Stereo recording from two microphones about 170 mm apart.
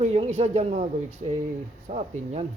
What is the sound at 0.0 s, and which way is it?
Speech, 35° right (ahead or behind).